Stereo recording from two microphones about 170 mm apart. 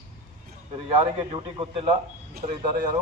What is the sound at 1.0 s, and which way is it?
Speech, 30° right (ahead or behind).